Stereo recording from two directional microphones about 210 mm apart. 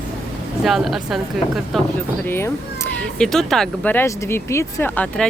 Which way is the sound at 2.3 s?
10° left (ahead or behind).